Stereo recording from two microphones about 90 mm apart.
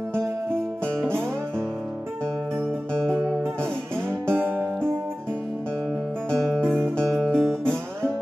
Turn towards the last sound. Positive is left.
turn(degrees=5)  # may be behind; listen again after turning